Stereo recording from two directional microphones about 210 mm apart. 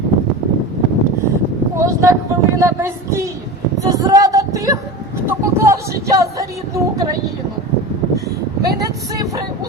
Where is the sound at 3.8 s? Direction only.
15° right (ahead or behind).